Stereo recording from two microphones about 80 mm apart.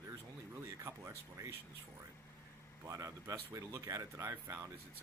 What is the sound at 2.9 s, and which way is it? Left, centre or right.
Speech, right.